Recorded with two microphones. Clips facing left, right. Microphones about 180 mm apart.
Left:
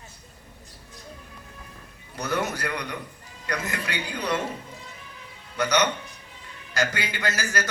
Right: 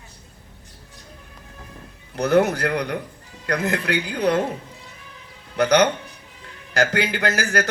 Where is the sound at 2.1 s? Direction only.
65° right (ahead or behind).